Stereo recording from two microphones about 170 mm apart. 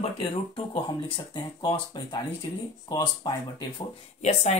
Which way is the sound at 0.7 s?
25° left (ahead or behind).